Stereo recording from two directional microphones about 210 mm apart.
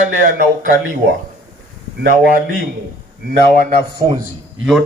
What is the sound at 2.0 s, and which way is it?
Speech, 45° right (ahead or behind).